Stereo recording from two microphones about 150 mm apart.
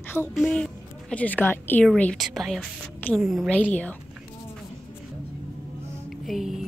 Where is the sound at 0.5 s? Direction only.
10° left (ahead or behind).